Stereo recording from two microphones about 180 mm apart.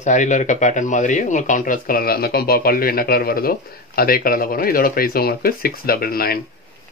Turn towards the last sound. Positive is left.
turn(degrees=55)  # may be behind; listen again after turning